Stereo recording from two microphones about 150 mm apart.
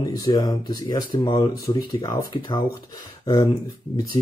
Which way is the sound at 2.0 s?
25° left (ahead or behind).